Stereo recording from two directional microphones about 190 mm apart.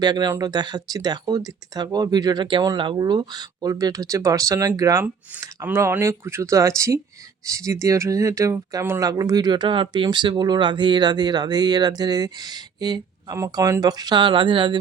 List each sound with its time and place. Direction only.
0.0 s speech: 20° right (ahead or behind)